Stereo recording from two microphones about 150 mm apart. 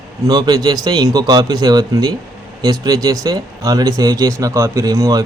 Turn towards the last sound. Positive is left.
turn(degrees=-25)  # may be behind; listen again after turning